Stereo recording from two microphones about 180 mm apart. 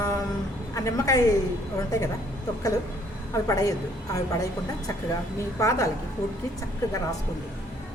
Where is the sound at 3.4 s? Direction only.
20° left (ahead or behind).